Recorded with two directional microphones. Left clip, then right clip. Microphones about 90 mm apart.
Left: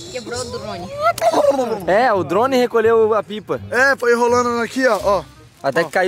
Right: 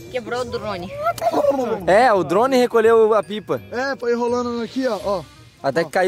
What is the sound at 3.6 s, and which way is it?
Speech, 50° right (ahead or behind).